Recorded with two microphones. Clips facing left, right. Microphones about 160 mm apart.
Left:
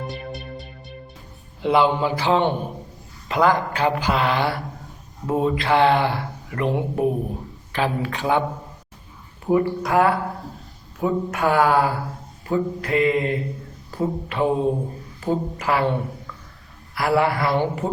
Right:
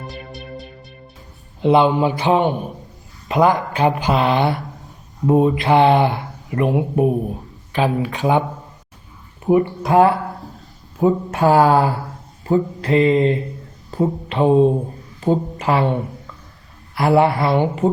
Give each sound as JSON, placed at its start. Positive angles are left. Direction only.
{"t": 0.1, "sound": "music", "side_deg": 0}
{"t": 1.6, "sound": "speech", "side_deg": -20}
{"t": 9.5, "sound": "speech", "side_deg": -20}
{"t": 16.9, "sound": "speech", "side_deg": -25}